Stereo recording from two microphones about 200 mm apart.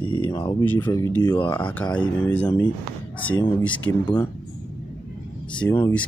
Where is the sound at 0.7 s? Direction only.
10° left (ahead or behind).